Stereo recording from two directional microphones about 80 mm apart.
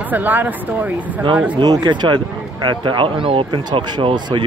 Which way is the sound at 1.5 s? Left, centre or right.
Right.